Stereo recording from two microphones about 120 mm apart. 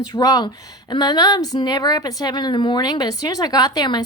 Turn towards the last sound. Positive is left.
turn(degrees=35)  # may be behind; listen again after turning